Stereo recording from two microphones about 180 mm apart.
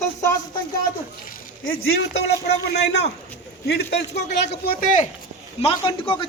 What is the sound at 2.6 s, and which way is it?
A man's voice, 70° left (ahead or behind).